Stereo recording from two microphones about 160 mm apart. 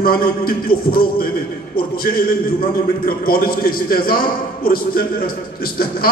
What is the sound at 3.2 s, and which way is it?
A man's voice, 65° left (ahead or behind).